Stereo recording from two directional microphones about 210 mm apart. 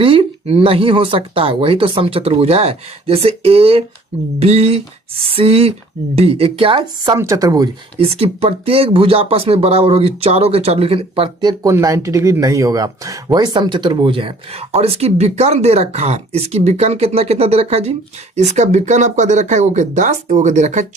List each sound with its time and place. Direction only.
0.0 s speech: 25° right (ahead or behind)